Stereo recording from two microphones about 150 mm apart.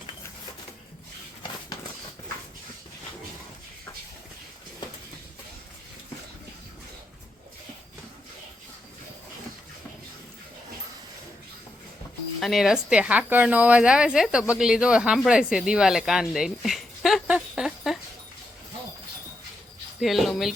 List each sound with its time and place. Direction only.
12.4 s a woman's voice: centre (ahead or behind)
20.0 s speech: centre (ahead or behind)